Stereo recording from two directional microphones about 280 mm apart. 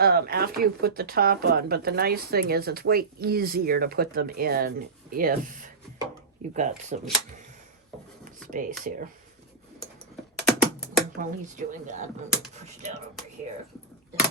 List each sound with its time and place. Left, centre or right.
0.0 s speech: right
8.4 s speech: right
10.3 s typing: centre
11.2 s speech: right